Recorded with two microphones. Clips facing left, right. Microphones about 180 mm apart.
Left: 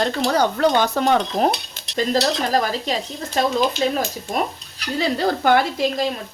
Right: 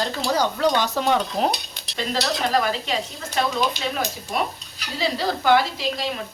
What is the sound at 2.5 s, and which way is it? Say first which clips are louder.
Speech: left 2 dB; 40° left (ahead or behind).